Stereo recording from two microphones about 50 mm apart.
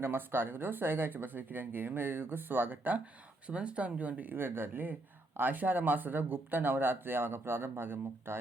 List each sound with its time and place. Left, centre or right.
0.0 s speech: right
3.5 s speech: right
4.4 s speech: right